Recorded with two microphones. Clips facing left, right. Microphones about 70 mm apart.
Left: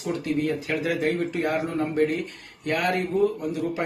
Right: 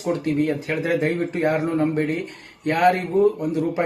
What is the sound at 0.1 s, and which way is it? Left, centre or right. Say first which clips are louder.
Speech: right 4 dB; right.